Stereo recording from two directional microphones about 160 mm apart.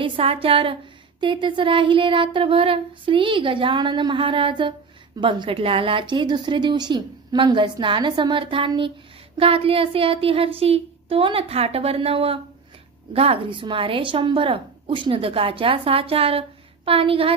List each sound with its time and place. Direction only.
0.0 s a woman's voice: 35° right (ahead or behind)